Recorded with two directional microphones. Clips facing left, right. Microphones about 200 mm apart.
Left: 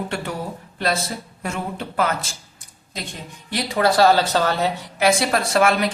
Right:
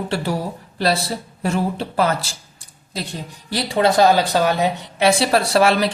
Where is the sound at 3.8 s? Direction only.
15° right (ahead or behind).